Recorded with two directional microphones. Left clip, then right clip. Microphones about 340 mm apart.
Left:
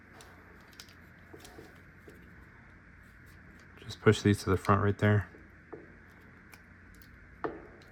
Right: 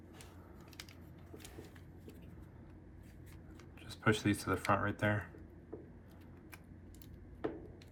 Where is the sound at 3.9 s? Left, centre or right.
Left.